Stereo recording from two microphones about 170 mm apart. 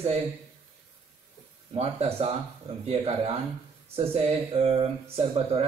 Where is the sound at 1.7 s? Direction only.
35° right (ahead or behind).